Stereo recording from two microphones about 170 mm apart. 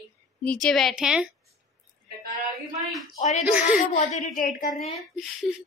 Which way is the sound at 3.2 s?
45° left (ahead or behind).